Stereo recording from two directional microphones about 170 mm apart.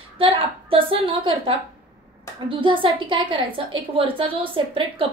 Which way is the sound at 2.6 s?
30° right (ahead or behind).